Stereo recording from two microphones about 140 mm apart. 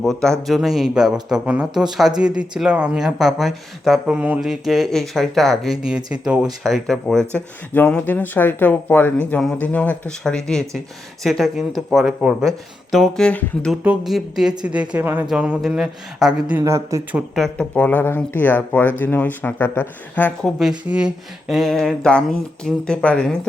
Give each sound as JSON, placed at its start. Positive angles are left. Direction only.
{"t": 0.0, "sound": "speech", "side_deg": 5}
{"t": 16.6, "sound": "speech", "side_deg": -20}
{"t": 17.2, "sound": "speech", "side_deg": 0}
{"t": 20.6, "sound": "speech", "side_deg": -5}